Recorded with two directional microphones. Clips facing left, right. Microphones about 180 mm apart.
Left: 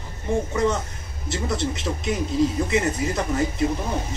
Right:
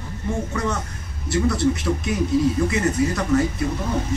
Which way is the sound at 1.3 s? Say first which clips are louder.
Right 6 dB; 20° left (ahead or behind).